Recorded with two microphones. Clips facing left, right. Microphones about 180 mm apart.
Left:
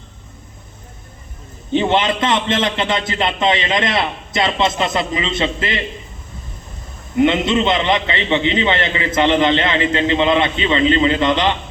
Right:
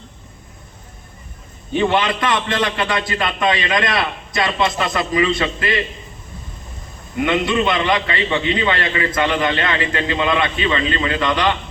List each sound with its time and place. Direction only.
1.7 s a man's voice: 25° left (ahead or behind)
7.2 s a man's voice: 25° left (ahead or behind)